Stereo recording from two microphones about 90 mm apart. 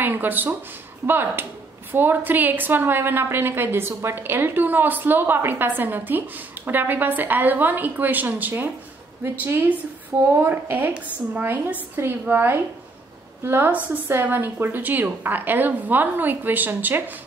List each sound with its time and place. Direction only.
0.0 s a woman's voice: 20° right (ahead or behind)